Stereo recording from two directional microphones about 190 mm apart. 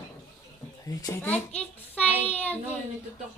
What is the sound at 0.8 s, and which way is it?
Speech, 15° left (ahead or behind).